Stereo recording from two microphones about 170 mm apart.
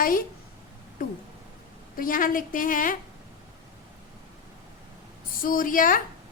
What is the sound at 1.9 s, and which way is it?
A woman's voice, 55° left (ahead or behind).